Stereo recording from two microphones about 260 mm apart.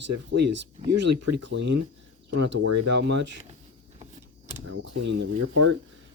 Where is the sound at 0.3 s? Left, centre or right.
Right.